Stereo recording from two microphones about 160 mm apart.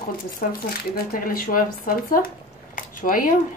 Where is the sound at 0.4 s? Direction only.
65° left (ahead or behind).